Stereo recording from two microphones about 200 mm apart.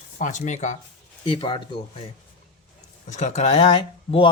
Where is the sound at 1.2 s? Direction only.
25° left (ahead or behind).